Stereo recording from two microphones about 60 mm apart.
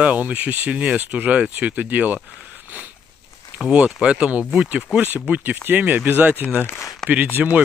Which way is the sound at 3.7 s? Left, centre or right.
Centre.